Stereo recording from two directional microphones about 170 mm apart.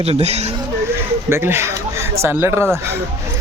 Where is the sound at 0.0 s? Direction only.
35° right (ahead or behind).